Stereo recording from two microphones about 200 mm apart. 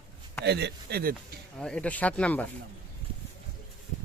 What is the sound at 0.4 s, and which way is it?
Speech, 55° right (ahead or behind).